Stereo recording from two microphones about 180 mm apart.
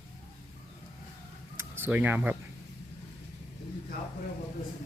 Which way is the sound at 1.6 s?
10° right (ahead or behind).